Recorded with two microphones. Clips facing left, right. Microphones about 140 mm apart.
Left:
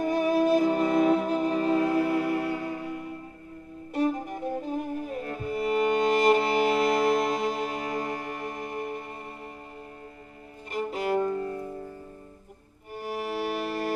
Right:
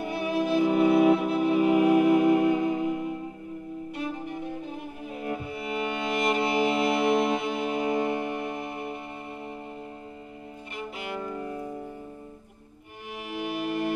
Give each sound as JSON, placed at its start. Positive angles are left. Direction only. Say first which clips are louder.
{"t": 0.0, "sound": "music", "louder": "left 5 dB", "side_deg": 40}
{"t": 0.7, "sound": "music", "louder": "right 3 dB", "side_deg": -10}
{"t": 3.9, "sound": "violin", "louder": "left 8 dB", "side_deg": 40}
{"t": 5.2, "sound": "music", "louder": "right 2 dB", "side_deg": -15}
{"t": 5.5, "sound": "music", "louder": "left 6 dB", "side_deg": 40}
{"t": 7.8, "sound": "music", "louder": "right 5 dB", "side_deg": -25}
{"t": 10.7, "sound": "music", "louder": "left 9 dB", "side_deg": 40}
{"t": 11.3, "sound": "music", "louder": "left 3 dB", "side_deg": -15}
{"t": 13.0, "sound": "music", "louder": "left 4 dB", "side_deg": 40}